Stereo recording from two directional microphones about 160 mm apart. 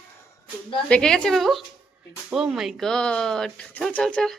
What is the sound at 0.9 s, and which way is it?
Speech, 5° left (ahead or behind).